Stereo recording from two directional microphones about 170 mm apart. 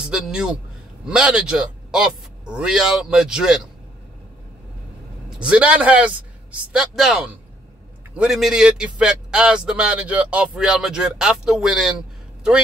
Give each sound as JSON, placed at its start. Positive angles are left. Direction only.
{"t": 0.0, "sound": "a man's voice", "side_deg": -5}
{"t": 5.4, "sound": "a man's voice", "side_deg": -5}